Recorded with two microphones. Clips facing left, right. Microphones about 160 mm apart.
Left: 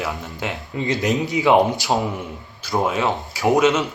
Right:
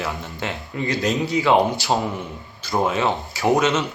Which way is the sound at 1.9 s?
5° left (ahead or behind).